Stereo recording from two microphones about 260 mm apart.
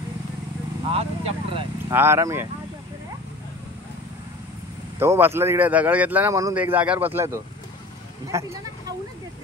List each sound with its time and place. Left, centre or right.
0.9 s speech: right
2.0 s a man's voice: centre
4.9 s a man's voice: centre